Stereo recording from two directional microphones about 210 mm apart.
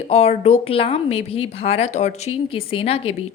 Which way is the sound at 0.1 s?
30° left (ahead or behind).